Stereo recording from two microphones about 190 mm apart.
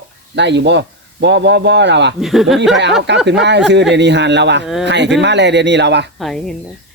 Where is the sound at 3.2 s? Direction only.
65° right (ahead or behind).